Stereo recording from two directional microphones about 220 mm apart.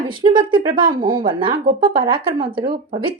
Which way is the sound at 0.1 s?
20° right (ahead or behind).